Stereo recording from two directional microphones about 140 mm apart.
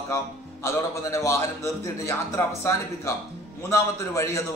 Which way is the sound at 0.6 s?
20° left (ahead or behind).